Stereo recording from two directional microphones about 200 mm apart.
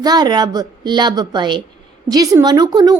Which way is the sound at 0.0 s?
20° right (ahead or behind).